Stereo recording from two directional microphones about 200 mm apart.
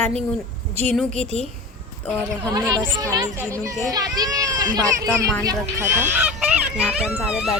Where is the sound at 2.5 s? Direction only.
20° right (ahead or behind).